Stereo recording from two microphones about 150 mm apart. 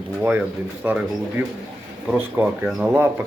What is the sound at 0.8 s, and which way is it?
Speech, 15° right (ahead or behind).